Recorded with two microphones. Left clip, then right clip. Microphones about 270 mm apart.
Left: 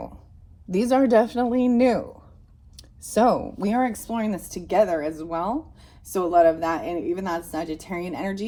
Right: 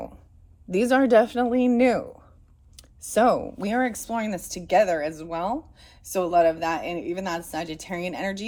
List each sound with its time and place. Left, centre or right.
0.9 s speech: right